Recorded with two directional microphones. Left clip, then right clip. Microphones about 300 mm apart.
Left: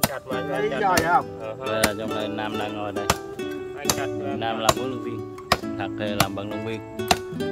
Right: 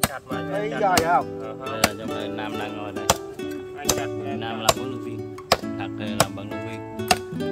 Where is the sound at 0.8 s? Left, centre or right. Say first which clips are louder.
Right 1 dB; centre.